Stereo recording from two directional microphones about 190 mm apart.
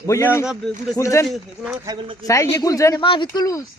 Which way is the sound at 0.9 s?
15° left (ahead or behind).